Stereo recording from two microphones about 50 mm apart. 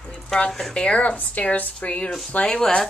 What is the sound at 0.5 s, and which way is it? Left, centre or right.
Speech, centre.